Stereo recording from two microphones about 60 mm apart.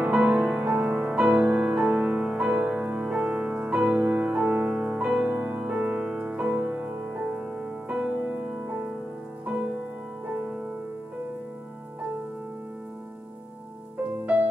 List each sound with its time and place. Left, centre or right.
0.0 s music: right
5.3 s music: right
5.8 s music: centre
6.5 s music: right
7.1 s music: centre
10.3 s music: centre